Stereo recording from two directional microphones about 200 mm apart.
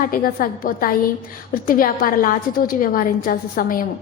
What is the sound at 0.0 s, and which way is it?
A woman's voice, 45° left (ahead or behind).